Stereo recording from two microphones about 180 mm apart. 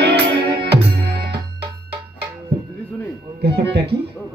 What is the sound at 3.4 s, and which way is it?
Speech, 65° right (ahead or behind).